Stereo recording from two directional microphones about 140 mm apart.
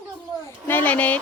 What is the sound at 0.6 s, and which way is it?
Speech, 10° left (ahead or behind).